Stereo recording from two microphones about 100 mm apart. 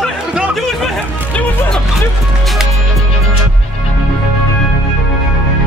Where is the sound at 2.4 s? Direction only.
Centre (ahead or behind).